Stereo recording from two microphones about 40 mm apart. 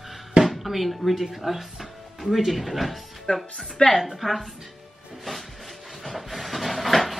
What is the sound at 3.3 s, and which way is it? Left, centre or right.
Speech, left.